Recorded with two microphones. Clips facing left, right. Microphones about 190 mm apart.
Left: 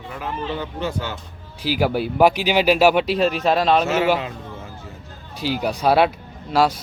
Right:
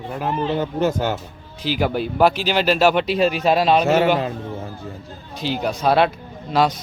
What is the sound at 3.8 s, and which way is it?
Speech, 40° right (ahead or behind).